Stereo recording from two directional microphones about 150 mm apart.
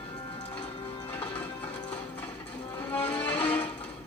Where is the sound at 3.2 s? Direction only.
10° left (ahead or behind).